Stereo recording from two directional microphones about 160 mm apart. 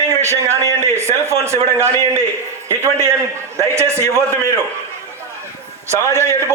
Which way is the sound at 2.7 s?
15° right (ahead or behind).